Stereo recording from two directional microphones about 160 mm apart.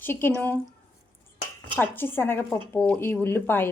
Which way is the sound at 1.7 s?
10° left (ahead or behind).